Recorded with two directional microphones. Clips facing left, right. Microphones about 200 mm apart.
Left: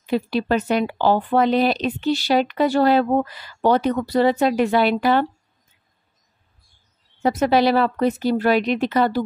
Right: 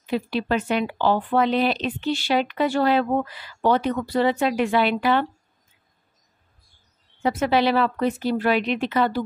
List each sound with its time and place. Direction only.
0.1 s speech: 40° left (ahead or behind)
7.2 s speech: 40° left (ahead or behind)